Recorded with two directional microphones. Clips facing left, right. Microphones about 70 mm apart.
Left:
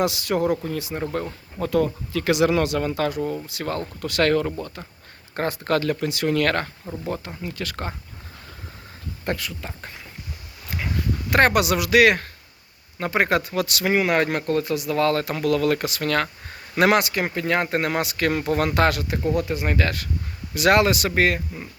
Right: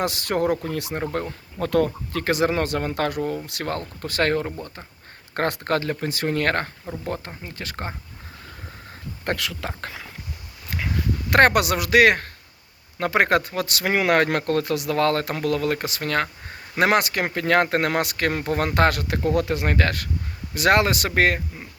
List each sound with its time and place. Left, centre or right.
0.0 s speech: right
2.2 s speech: right
4.0 s speech: right
5.3 s speech: right
5.7 s speech: right
9.4 s speech: right
10.7 s a sound: right
11.3 s speech: right
13.0 s speech: right
13.5 s speech: right
13.8 s speech: right
17.0 s speech: right
19.0 s speech: right
20.5 s speech: right